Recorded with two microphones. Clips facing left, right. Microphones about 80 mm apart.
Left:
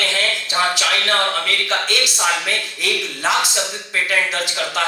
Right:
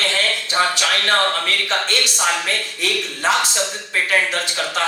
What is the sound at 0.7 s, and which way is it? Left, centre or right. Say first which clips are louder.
A man's voice: right 1 dB; right.